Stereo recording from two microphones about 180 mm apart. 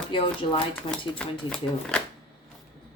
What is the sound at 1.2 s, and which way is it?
Speech, 5° left (ahead or behind).